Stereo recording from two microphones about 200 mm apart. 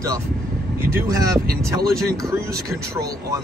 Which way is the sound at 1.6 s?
15° right (ahead or behind).